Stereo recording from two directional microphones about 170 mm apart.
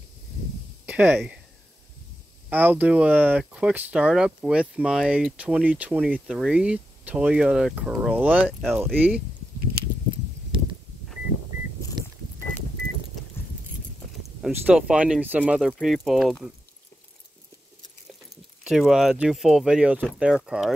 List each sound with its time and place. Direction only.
0.8 s speech: 10° right (ahead or behind)
2.5 s speech: 10° right (ahead or behind)
8.9 s speech: 10° right (ahead or behind)
12.0 s vehicle: 25° right (ahead or behind)
14.5 s speech: 5° right (ahead or behind)
18.3 s speech: 5° right (ahead or behind)